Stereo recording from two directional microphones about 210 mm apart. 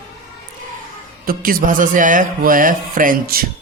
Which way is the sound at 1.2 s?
40° right (ahead or behind).